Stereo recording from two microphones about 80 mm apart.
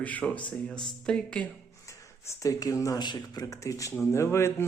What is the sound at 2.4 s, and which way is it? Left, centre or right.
Speech, left.